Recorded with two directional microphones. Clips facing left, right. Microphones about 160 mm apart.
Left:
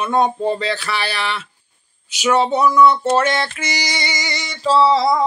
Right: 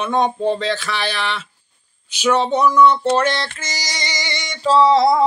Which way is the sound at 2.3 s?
5° left (ahead or behind).